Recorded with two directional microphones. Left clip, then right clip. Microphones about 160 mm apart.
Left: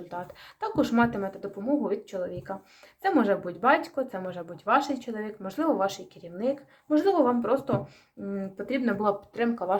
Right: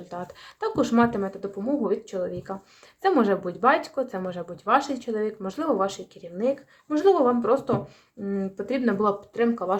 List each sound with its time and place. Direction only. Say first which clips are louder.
0.1 s speech: right 3 dB; 30° right (ahead or behind)